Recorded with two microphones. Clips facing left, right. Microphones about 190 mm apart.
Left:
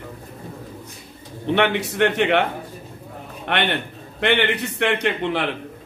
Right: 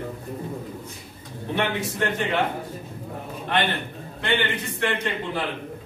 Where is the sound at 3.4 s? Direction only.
70° left (ahead or behind).